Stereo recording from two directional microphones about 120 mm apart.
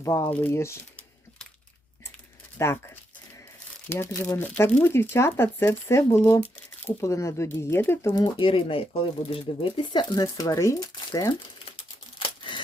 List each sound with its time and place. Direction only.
0.0 s speech: 25° left (ahead or behind)
2.6 s speech: 25° left (ahead or behind)
3.8 s speech: 20° left (ahead or behind)
8.1 s speech: 40° left (ahead or behind)
12.4 s a sound: 45° left (ahead or behind)